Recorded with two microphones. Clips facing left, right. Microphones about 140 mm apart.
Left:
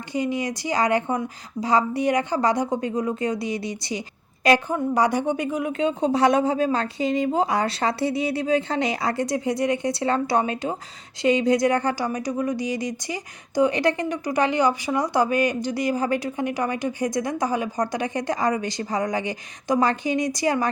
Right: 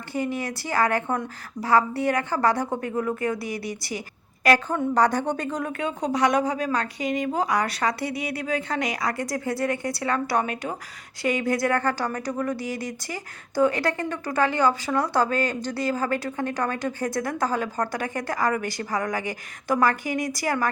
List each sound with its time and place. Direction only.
0.1 s speech: 15° left (ahead or behind)
4.7 s speech: 10° left (ahead or behind)
5.7 s speech: 25° left (ahead or behind)